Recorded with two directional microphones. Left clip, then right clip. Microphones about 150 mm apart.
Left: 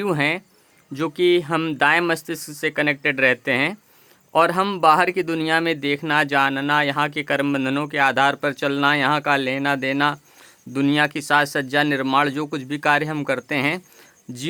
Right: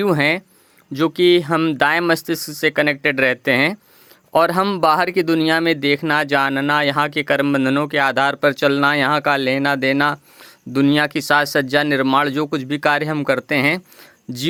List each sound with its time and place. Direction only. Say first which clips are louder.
0.0 s speech: right 4 dB; 30° right (ahead or behind)